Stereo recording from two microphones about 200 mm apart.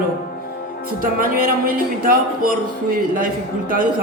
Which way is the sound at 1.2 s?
45° right (ahead or behind).